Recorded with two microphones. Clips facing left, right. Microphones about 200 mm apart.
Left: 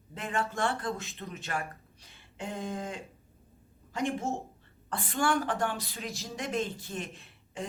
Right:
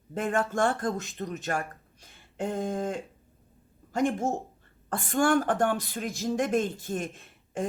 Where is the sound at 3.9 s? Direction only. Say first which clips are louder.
Right 5 dB; 50° right (ahead or behind).